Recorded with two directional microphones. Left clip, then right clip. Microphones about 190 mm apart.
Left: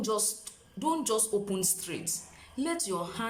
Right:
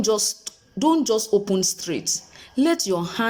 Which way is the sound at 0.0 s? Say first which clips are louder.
Right 10 dB; 40° right (ahead or behind).